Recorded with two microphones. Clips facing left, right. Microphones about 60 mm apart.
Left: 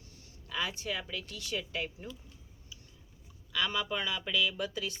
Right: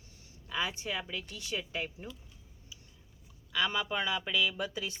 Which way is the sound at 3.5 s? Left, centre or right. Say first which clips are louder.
Right 1 dB; centre.